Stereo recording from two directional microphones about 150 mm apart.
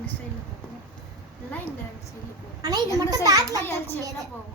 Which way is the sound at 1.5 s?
10° left (ahead or behind).